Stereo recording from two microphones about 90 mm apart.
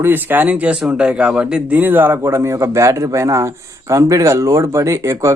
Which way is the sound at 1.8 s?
20° right (ahead or behind).